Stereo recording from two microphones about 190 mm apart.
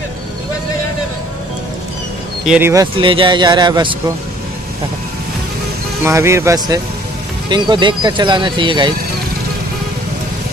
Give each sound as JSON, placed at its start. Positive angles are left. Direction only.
{"t": 2.4, "sound": "speech", "side_deg": -5}
{"t": 2.7, "sound": "speech", "side_deg": -20}
{"t": 6.0, "sound": "speech", "side_deg": -15}